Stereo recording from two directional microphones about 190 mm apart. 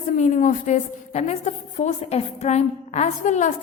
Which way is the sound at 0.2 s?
40° left (ahead or behind).